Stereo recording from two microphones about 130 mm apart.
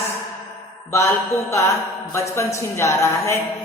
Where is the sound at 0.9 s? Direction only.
20° left (ahead or behind).